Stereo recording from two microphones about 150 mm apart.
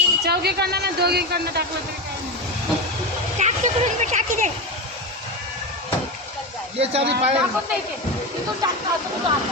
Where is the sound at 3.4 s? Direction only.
50° right (ahead or behind).